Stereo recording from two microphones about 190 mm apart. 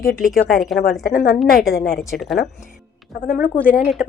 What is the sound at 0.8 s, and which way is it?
A woman's voice, 50° left (ahead or behind).